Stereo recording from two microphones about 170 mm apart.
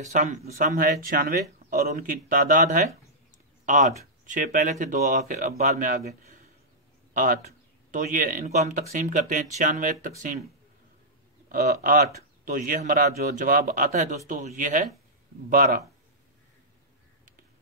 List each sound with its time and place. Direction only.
0.0 s speech: 45° right (ahead or behind)
7.9 s speech: 50° right (ahead or behind)
11.4 s speech: 60° right (ahead or behind)